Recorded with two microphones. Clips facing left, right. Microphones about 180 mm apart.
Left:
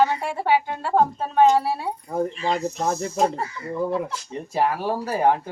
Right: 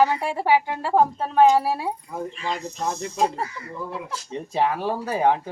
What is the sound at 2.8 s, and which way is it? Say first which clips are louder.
Speech: even; 40° left (ahead or behind).